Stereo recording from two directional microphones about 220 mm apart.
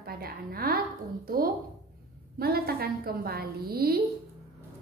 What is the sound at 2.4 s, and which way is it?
A woman's voice, 45° right (ahead or behind).